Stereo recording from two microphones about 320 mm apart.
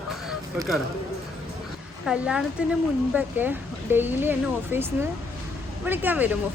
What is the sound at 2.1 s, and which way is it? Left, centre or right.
Speech, centre.